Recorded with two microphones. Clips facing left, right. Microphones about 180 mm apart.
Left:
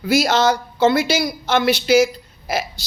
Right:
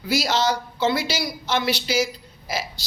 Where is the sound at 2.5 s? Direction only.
55° left (ahead or behind).